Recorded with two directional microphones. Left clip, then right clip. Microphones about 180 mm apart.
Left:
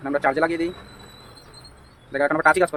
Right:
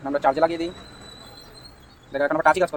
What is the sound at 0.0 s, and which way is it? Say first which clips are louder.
Speech: right 1 dB; 25° left (ahead or behind).